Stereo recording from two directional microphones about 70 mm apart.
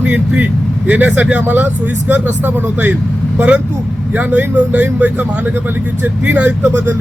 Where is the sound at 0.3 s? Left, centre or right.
Right.